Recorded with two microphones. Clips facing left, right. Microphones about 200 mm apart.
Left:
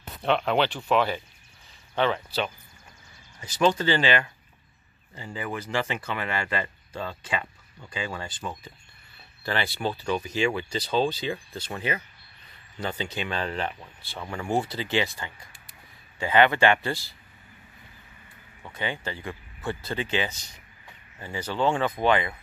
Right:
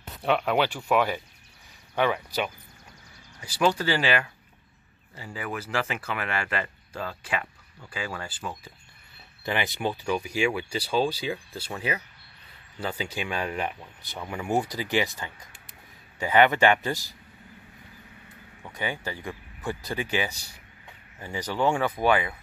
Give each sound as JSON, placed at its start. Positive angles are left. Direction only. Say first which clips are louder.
{"t": 0.2, "sound": "speech", "louder": "even", "side_deg": -10}
{"t": 9.4, "sound": "speech", "louder": "even", "side_deg": -15}
{"t": 18.6, "sound": "speech", "louder": "even", "side_deg": -10}